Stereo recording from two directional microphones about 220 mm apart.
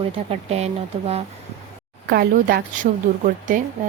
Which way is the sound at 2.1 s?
45° right (ahead or behind).